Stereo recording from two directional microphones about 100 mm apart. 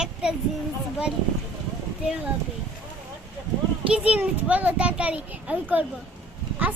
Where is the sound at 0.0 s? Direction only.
5° right (ahead or behind).